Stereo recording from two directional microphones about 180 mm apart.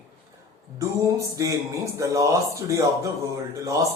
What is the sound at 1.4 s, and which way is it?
A man's voice, 15° right (ahead or behind).